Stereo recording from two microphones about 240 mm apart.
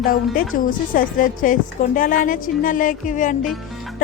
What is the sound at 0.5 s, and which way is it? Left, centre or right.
A woman's voice, left.